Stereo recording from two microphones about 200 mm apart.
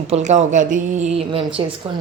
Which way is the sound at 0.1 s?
35° right (ahead or behind).